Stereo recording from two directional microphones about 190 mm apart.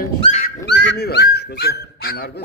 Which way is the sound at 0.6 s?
70° left (ahead or behind).